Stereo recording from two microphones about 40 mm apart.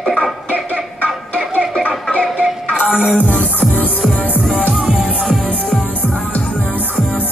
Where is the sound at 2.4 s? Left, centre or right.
Right.